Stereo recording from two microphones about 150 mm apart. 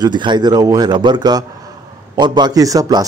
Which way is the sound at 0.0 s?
30° right (ahead or behind).